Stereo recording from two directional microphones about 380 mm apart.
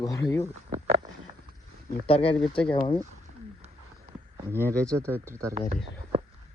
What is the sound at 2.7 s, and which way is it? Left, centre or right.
Speech, centre.